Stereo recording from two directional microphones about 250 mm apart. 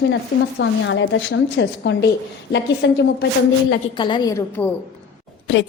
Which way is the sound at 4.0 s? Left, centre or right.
Centre.